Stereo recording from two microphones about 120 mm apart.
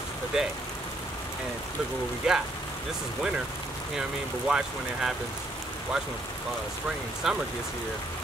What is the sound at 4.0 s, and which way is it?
Speech, 5° right (ahead or behind).